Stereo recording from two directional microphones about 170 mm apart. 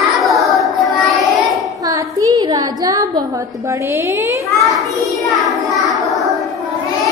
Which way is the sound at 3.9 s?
15° right (ahead or behind).